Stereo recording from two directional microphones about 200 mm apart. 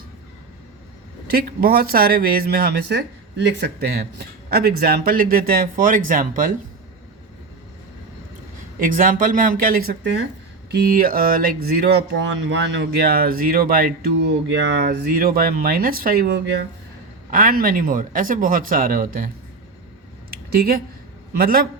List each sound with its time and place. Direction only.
1.3 s speech: 50° right (ahead or behind)
8.8 s speech: 45° right (ahead or behind)
17.3 s speech: 45° right (ahead or behind)
20.3 s a sound: 50° right (ahead or behind)
21.3 s speech: 50° right (ahead or behind)